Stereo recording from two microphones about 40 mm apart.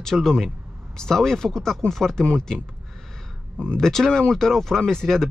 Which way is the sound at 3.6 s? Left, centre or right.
Left.